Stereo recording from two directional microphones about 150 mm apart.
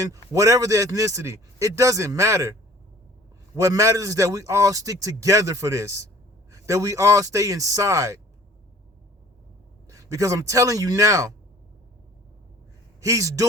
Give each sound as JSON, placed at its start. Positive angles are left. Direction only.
{"t": 0.0, "sound": "a man's voice", "side_deg": -20}
{"t": 9.9, "sound": "a man's voice", "side_deg": -20}
{"t": 13.0, "sound": "a man's voice", "side_deg": -20}